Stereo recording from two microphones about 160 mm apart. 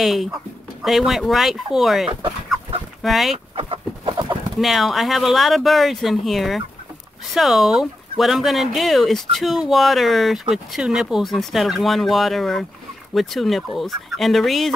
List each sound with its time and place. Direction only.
0.0 s speech: centre (ahead or behind)
3.5 s bird: 35° right (ahead or behind)
4.6 s speech: centre (ahead or behind)